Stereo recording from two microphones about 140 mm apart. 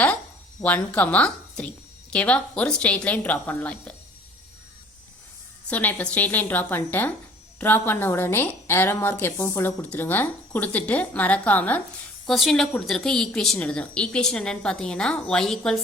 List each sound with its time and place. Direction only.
0.6 s a woman's voice: 10° left (ahead or behind)
5.6 s a woman's voice: 10° left (ahead or behind)